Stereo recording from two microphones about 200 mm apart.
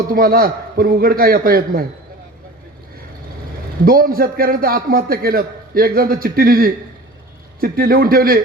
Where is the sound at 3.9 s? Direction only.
45° right (ahead or behind).